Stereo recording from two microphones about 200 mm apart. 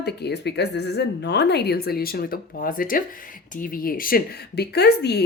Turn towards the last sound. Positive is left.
turn(degrees=55)  # may be behind; listen again after turning